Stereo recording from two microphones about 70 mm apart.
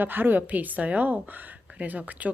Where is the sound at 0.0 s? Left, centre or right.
Right.